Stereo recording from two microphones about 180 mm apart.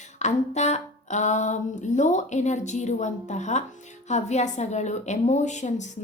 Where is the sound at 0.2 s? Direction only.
40° left (ahead or behind).